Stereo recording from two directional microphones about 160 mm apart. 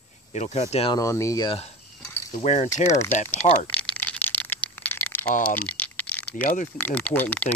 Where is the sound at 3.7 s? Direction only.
10° left (ahead or behind).